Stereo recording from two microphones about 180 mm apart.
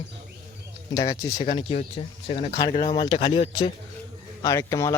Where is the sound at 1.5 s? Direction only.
35° left (ahead or behind); by 4.9 s 15° left (ahead or behind).